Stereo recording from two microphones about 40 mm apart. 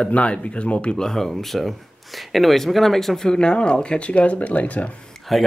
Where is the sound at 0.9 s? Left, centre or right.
Centre.